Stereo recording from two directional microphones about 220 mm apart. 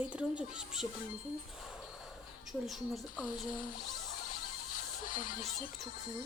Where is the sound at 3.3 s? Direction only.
40° left (ahead or behind).